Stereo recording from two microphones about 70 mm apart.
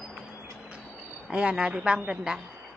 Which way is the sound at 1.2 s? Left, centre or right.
Centre.